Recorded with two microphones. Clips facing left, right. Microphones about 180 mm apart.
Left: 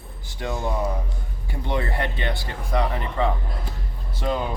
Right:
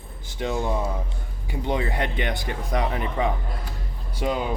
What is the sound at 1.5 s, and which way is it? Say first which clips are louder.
A man's voice: right 1 dB; 15° right (ahead or behind).